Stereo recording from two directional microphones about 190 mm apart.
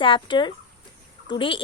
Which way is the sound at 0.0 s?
25° left (ahead or behind).